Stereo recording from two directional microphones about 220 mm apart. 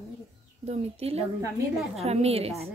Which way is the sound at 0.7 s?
30° right (ahead or behind).